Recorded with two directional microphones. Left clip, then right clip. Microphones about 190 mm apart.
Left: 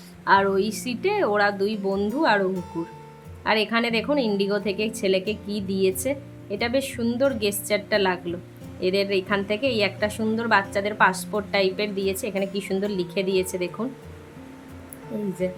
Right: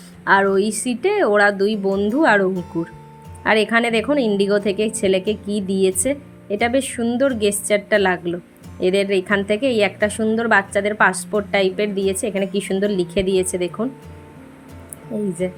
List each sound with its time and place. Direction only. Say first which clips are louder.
0.3 s a woman's voice: right 4 dB; 25° right (ahead or behind)
2.5 s speech: right 5 dB; centre (ahead or behind)
3.4 s a woman's voice: right 6 dB; 25° right (ahead or behind)
15.4 s a woman's voice: right 1 dB; 20° right (ahead or behind)